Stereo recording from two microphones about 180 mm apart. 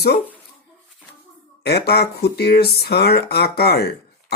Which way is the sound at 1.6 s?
60° left (ahead or behind).